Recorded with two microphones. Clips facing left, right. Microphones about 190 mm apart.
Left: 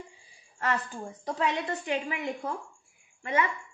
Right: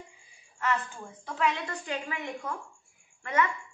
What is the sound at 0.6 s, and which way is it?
Speech, 40° left (ahead or behind).